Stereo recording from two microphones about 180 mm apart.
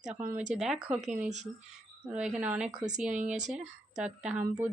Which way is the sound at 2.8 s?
45° right (ahead or behind).